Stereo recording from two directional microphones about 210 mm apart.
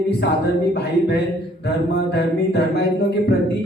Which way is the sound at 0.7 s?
55° left (ahead or behind).